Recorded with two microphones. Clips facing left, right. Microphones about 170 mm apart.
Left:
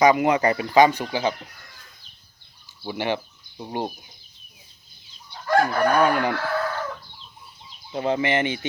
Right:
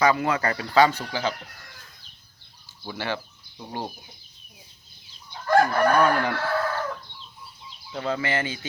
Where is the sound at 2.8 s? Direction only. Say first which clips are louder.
Left 5 dB; 15° left (ahead or behind).